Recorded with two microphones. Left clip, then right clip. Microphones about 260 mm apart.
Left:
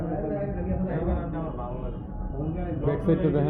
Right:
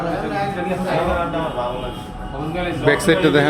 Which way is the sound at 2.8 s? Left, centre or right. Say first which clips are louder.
Right 10 dB; right.